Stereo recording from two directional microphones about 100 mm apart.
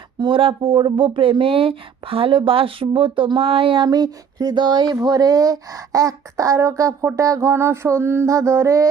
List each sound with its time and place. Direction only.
0.2 s speech: 60° right (ahead or behind)
3.8 s speech: 40° right (ahead or behind)